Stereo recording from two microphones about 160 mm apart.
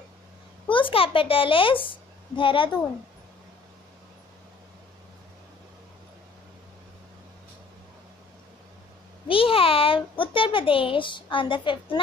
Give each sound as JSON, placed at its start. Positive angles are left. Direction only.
{"t": 0.7, "sound": "a child's voice", "side_deg": 35}
{"t": 9.3, "sound": "a child's voice", "side_deg": 35}